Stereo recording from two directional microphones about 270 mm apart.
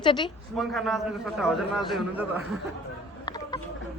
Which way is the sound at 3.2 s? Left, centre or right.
Centre.